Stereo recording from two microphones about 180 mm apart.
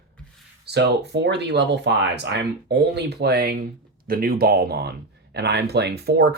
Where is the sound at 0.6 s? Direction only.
70° right (ahead or behind).